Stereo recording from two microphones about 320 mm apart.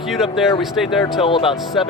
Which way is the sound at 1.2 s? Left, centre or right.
Centre.